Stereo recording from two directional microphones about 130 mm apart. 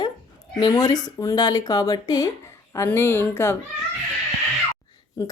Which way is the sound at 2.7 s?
20° left (ahead or behind).